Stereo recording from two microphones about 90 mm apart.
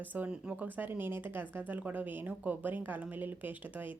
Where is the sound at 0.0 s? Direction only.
20° right (ahead or behind).